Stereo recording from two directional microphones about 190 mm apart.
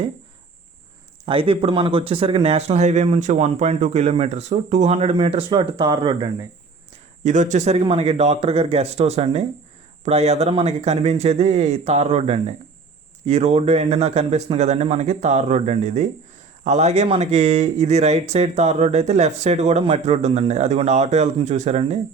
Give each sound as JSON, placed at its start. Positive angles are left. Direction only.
{"t": 1.2, "sound": "speech", "side_deg": -30}
{"t": 7.3, "sound": "speech", "side_deg": -40}